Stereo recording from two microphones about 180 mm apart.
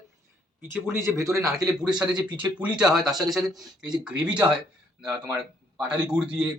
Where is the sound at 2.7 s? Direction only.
5° right (ahead or behind).